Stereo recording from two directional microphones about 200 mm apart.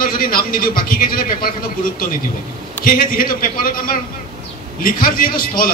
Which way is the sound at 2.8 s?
45° left (ahead or behind).